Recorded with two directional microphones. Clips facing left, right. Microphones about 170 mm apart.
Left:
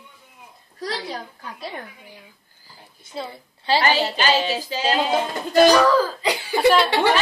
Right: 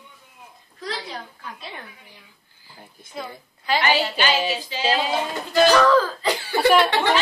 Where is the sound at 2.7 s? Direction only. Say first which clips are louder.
Left 1 dB; 30° left (ahead or behind).